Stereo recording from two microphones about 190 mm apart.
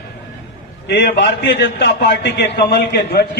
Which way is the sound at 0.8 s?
60° left (ahead or behind).